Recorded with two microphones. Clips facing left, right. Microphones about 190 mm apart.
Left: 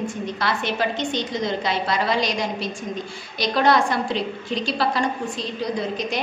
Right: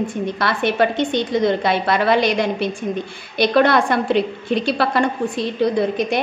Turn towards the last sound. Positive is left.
turn(degrees=-60)  # may be behind; listen again after turning